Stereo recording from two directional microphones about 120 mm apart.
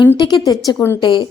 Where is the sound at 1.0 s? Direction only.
40° left (ahead or behind).